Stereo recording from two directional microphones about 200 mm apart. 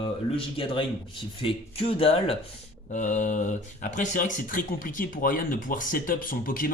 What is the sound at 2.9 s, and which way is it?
Speech, 40° left (ahead or behind).